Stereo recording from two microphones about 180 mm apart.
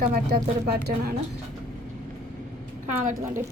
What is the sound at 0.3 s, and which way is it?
Speech, 60° right (ahead or behind).